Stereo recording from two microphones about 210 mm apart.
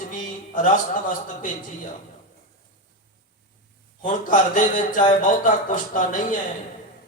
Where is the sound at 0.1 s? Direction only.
40° left (ahead or behind).